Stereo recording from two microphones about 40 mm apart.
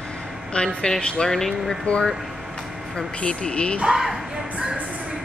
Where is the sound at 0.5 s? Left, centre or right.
Left.